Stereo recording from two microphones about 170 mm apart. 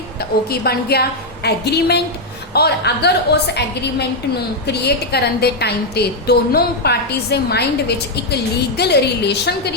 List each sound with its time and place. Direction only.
0.5 s a woman's voice: 65° left (ahead or behind)